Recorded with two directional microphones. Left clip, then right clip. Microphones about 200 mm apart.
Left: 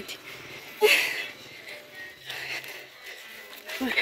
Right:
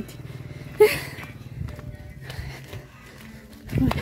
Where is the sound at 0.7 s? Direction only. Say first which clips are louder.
Right 3 dB; 20° right (ahead or behind).